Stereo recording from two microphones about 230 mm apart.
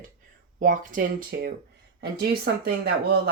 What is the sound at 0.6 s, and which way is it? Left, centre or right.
Speech, right.